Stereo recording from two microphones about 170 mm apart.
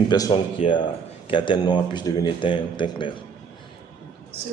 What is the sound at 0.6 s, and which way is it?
Speech, 30° left (ahead or behind).